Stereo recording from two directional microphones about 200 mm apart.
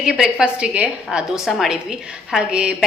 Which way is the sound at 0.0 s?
5° right (ahead or behind).